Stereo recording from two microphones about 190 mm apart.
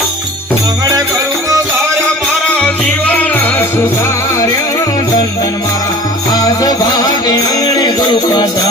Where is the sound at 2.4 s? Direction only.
5° left (ahead or behind).